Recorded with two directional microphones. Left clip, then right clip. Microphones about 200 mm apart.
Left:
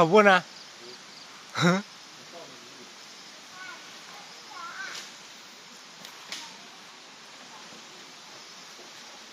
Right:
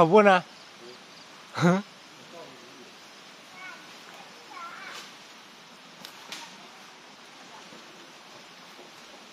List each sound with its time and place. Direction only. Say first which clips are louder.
0.0 s speech: even; 10° right (ahead or behind)
1.5 s speech: even; 5° right (ahead or behind)